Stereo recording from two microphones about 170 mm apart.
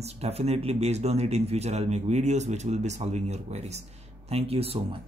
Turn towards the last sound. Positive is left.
turn(degrees=-35)  # may be behind; listen again after turning